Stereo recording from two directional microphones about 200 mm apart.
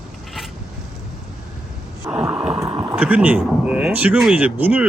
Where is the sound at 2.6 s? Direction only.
25° right (ahead or behind).